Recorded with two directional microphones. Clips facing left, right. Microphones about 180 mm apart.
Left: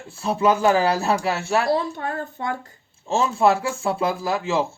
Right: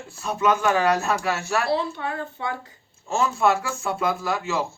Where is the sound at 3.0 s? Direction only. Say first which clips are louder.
Left 3 dB; 30° left (ahead or behind).